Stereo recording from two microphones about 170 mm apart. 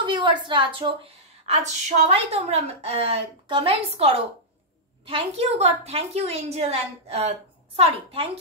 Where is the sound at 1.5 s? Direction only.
40° right (ahead or behind).